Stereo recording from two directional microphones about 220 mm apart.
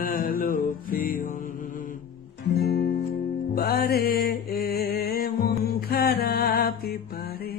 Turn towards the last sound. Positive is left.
turn(degrees=45)  # may be behind; listen again after turning